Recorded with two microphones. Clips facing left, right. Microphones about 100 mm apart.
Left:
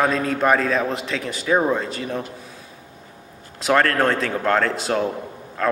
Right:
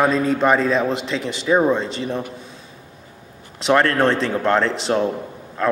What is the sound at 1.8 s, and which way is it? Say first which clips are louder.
Speech: right 3 dB; 30° right (ahead or behind).